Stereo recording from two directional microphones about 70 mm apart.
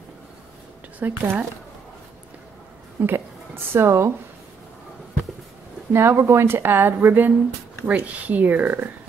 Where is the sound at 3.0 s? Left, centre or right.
Right.